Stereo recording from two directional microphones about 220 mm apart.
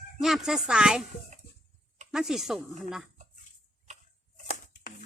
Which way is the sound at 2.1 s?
Centre (ahead or behind).